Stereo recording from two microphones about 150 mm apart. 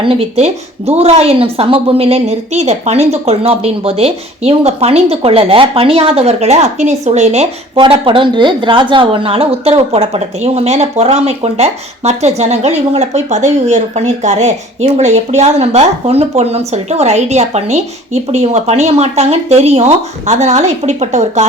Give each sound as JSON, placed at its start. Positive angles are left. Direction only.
{"t": 0.0, "sound": "a woman's voice", "side_deg": -40}
{"t": 7.8, "sound": "a woman's voice", "side_deg": -35}